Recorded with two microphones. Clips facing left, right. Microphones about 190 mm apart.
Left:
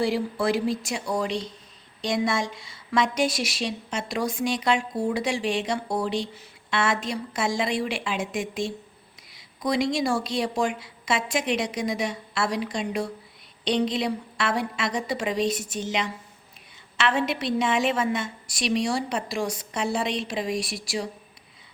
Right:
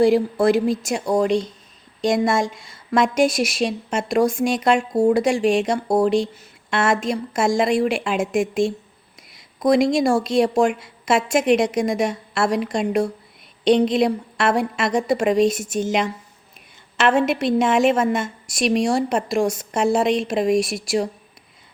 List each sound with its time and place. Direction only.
0.0 s a woman's voice: 45° right (ahead or behind)